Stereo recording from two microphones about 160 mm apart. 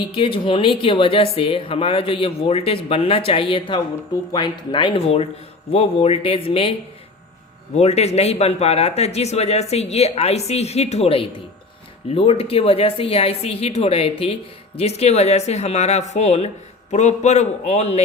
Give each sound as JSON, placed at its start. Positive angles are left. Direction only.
{"t": 0.2, "sound": "speech", "side_deg": 35}
{"t": 7.8, "sound": "speech", "side_deg": 40}